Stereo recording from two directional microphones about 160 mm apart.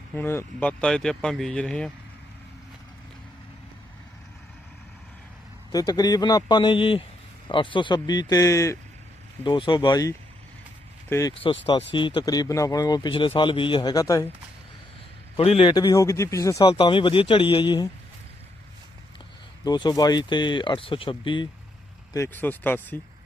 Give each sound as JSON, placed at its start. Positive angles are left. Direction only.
{"t": 0.1, "sound": "speech", "side_deg": 15}
{"t": 5.7, "sound": "speech", "side_deg": 25}
{"t": 9.4, "sound": "speech", "side_deg": 30}
{"t": 11.3, "sound": "speech", "side_deg": 35}
{"t": 15.4, "sound": "speech", "side_deg": 35}
{"t": 19.6, "sound": "speech", "side_deg": 25}
{"t": 22.1, "sound": "speech", "side_deg": 15}